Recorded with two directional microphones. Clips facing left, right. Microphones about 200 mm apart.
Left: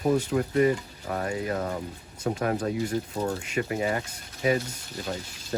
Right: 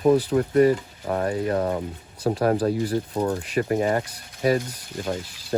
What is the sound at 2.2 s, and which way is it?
Speech, 35° right (ahead or behind).